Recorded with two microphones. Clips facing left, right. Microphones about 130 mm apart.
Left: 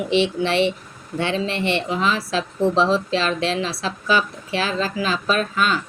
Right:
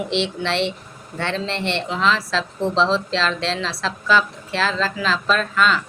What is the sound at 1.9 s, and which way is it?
Speech, 90° right.